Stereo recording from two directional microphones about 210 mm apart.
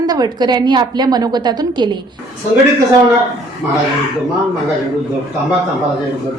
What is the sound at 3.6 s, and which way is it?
Speech, 5° right (ahead or behind).